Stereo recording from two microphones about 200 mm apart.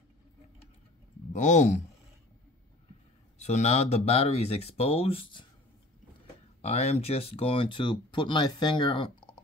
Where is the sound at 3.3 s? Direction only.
35° left (ahead or behind).